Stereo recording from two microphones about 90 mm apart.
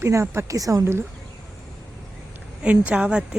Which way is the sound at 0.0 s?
30° right (ahead or behind).